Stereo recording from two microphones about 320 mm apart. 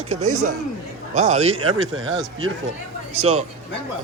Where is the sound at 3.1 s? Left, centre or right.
Centre.